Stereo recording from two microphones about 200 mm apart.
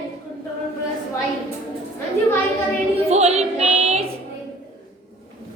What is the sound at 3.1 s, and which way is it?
Music, 35° right (ahead or behind).